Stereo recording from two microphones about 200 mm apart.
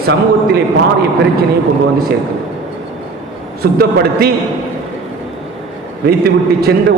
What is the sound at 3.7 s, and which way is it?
Speech, 50° right (ahead or behind).